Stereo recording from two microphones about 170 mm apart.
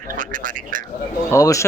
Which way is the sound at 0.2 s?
50° right (ahead or behind).